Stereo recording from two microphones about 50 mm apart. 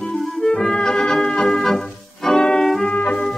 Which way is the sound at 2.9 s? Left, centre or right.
Left.